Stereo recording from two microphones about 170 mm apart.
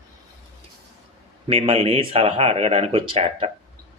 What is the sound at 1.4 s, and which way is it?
Speech, 35° right (ahead or behind).